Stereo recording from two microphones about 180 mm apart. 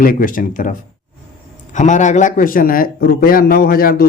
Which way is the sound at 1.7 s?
45° left (ahead or behind).